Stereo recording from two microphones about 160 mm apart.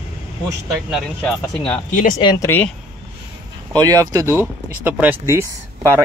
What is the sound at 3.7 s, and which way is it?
Speech, 25° right (ahead or behind).